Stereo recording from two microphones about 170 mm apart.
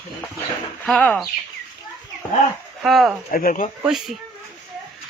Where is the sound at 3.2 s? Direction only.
50° left (ahead or behind).